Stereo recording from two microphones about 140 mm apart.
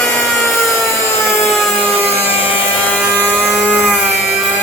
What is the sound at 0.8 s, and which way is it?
Wood, 20° left (ahead or behind).